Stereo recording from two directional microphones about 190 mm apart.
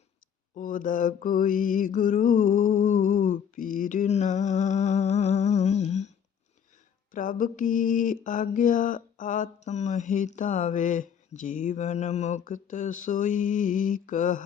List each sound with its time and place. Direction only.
0.5 s mantra: 45° left (ahead or behind)
7.1 s mantra: 45° left (ahead or behind)